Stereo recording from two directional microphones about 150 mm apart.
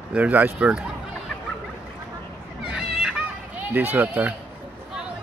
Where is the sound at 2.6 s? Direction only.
5° right (ahead or behind).